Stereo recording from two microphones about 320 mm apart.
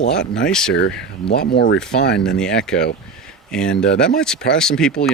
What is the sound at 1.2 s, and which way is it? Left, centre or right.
Speech, left.